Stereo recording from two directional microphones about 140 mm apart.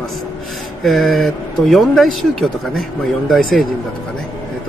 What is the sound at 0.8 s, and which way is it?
Speech, centre (ahead or behind).